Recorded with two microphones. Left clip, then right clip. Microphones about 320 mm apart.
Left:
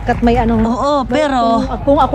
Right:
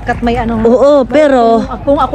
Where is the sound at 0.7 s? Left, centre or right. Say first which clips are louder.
Right 12 dB; centre.